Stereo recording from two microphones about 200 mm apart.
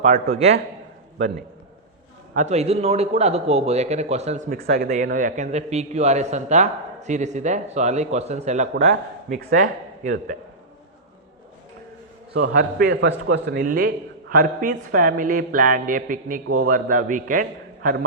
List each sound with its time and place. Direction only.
0.0 s a man's voice: 35° right (ahead or behind)
2.3 s a man's voice: 35° right (ahead or behind)
4.6 s a man's voice: 50° right (ahead or behind)
12.8 s speech: 60° right (ahead or behind); by 17.4 s 40° right (ahead or behind)